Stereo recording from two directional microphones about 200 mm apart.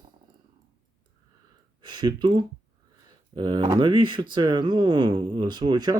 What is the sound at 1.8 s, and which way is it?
Speech, 20° right (ahead or behind).